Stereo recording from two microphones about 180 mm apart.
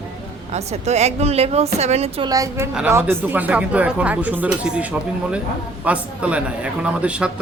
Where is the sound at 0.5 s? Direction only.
35° right (ahead or behind).